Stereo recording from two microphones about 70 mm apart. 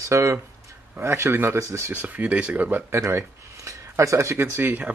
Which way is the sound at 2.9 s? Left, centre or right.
Right.